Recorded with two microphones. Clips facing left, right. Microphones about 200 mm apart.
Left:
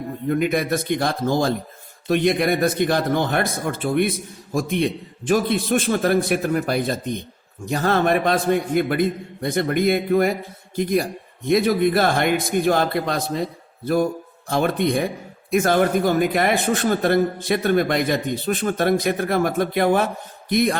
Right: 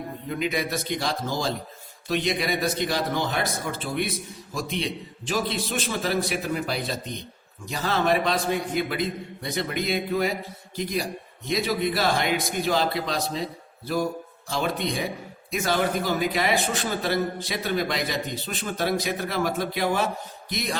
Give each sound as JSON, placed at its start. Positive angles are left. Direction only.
{"t": 0.3, "sound": "a man's voice", "side_deg": 55}